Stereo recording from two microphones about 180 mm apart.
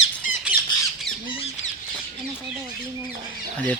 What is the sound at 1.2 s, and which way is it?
Squawk, 35° left (ahead or behind).